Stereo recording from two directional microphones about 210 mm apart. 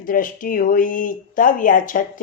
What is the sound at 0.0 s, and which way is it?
Speech, 40° left (ahead or behind).